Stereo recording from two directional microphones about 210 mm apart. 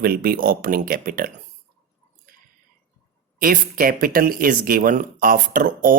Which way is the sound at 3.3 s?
40° right (ahead or behind).